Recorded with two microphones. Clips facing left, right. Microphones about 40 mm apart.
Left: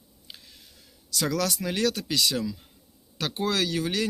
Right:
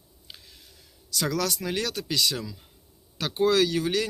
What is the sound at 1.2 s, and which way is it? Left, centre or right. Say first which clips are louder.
Speech: even; left.